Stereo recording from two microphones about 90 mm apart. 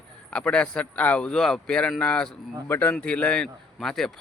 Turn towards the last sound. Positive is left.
turn(degrees=5)  # may be behind; listen again after turning